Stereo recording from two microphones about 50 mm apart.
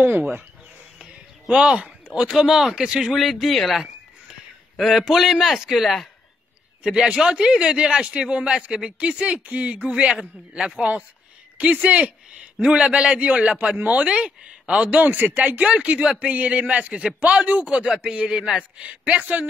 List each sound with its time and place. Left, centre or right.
1.5 s speech: centre
3.1 s a man's voice: centre
6.8 s speech: centre
14.9 s speech: right
15.4 s speech: right